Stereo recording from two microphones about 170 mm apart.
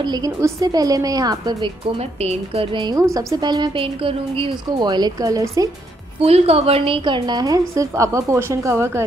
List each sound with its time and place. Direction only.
0.0 s a woman's voice: 25° right (ahead or behind)
2.0 s a woman's voice: 35° right (ahead or behind); by 5.7 s 20° right (ahead or behind)
6.1 s a woman's voice: 35° right (ahead or behind); by 9.0 s 15° right (ahead or behind)